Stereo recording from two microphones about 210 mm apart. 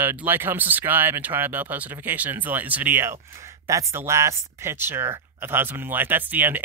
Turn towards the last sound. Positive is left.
turn(degrees=-10)  # may be behind; listen again after turning